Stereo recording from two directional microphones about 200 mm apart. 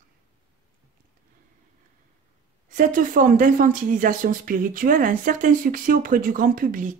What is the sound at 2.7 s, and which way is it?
Speech, 40° right (ahead or behind).